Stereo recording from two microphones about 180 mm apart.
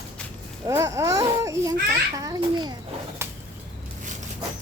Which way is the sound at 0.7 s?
15° right (ahead or behind).